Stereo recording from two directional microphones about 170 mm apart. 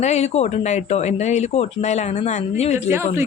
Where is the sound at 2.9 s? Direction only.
15° right (ahead or behind).